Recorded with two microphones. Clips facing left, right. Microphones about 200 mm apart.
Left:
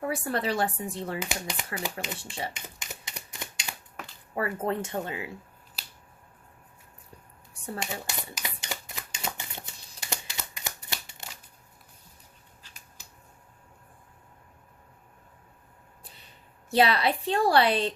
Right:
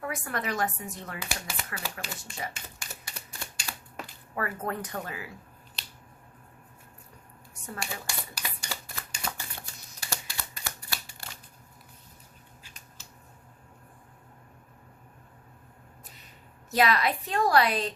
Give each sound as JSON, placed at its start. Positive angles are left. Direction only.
{"t": 0.0, "sound": "speech", "side_deg": 30}
{"t": 2.6, "sound": "typewriter", "side_deg": 20}
{"t": 4.4, "sound": "speech", "side_deg": 25}
{"t": 7.5, "sound": "shuffling cards", "side_deg": 30}
{"t": 13.0, "sound": "a sound", "side_deg": 15}
{"t": 16.6, "sound": "a woman's voice", "side_deg": 30}